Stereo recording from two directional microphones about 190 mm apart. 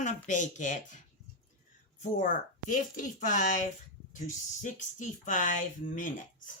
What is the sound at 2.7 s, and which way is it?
Speech, 45° left (ahead or behind).